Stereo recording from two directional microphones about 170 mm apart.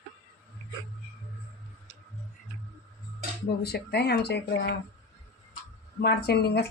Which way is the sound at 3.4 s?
70° left (ahead or behind).